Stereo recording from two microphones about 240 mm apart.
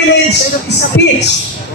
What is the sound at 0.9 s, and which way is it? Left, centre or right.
Speech, left.